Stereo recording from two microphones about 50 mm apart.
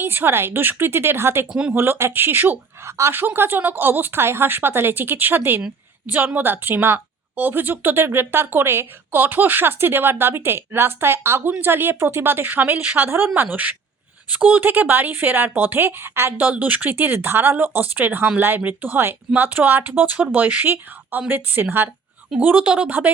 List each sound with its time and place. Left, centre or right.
0.0 s speech: right
2.8 s a woman's voice: right
3.2 s speech: right
6.1 s speech: right
9.2 s speech: right
13.1 s speech: right
16.4 s speech: right
22.4 s speech: right
22.9 s speech: right